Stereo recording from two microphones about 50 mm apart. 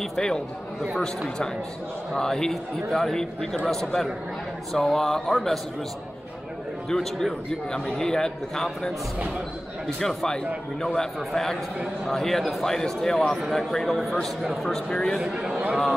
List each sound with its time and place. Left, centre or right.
0.0 s a man's voice: centre
2.1 s a man's voice: centre
6.9 s a man's voice: centre
9.9 s a man's voice: centre
14.9 s a man's voice: centre
15.1 s a man's voice: centre